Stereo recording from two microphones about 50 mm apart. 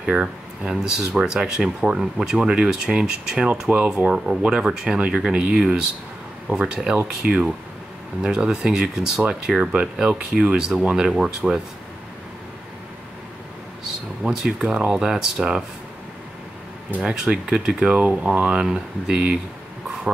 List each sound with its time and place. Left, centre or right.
0.0 s speech: centre
14.2 s speech: centre
17.0 s speech: centre
18.5 s speech: centre